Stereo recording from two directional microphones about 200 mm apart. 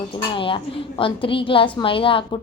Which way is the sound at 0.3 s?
25° left (ahead or behind).